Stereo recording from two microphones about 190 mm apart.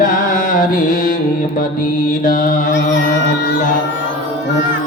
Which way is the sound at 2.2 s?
45° left (ahead or behind).